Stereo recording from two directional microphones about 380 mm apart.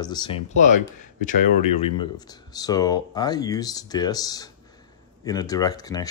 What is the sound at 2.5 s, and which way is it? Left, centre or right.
Speech, centre.